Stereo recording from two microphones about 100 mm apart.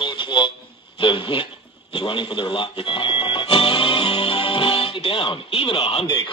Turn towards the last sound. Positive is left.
turn(degrees=45)  # may be behind; listen again after turning